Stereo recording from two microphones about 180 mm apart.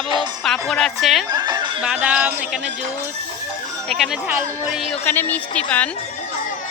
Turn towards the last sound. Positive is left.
turn(degrees=10)  # may be behind; listen again after turning